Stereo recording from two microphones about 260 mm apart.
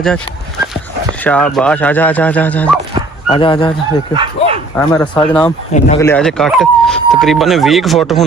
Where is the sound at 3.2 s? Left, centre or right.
Centre.